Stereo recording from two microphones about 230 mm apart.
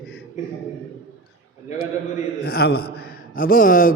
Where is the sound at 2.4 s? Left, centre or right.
Left.